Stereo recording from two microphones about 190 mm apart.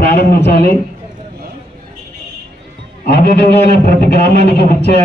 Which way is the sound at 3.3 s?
55° left (ahead or behind).